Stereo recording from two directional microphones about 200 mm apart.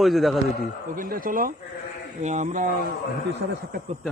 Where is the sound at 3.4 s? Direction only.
85° right.